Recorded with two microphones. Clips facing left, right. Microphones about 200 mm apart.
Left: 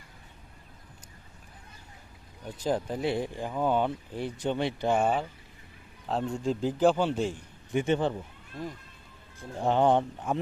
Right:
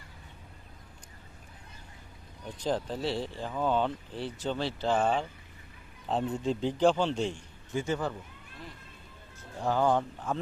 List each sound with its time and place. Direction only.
2.6 s speech: 10° left (ahead or behind)
6.1 s a man's voice: centre (ahead or behind)
7.7 s speech: 25° left (ahead or behind)
9.4 s speech: 25° left (ahead or behind)